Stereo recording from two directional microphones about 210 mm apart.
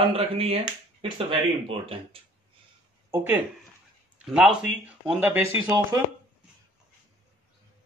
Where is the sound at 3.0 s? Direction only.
10° right (ahead or behind).